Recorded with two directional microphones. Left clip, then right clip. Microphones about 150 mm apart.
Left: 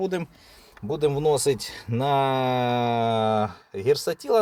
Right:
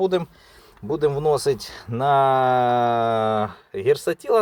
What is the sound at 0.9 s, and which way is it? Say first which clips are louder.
Speech: right 2 dB; centre (ahead or behind).